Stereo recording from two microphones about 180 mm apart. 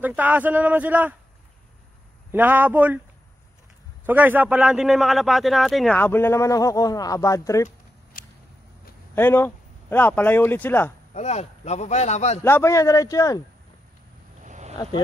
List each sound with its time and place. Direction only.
0.0 s speech: 10° right (ahead or behind)
2.3 s speech: 10° right (ahead or behind)
4.0 s a man's voice: 10° right (ahead or behind); by 7.7 s 15° left (ahead or behind)
9.1 s speech: 10° left (ahead or behind)
11.1 s speech: 40° left (ahead or behind)
12.4 s speech: 15° left (ahead or behind)
14.4 s a sound: 40° right (ahead or behind)